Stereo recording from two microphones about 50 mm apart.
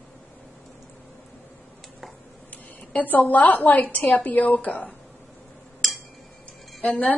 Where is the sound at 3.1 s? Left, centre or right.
Left.